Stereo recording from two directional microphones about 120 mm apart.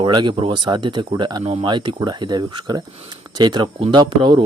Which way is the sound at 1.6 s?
40° right (ahead or behind).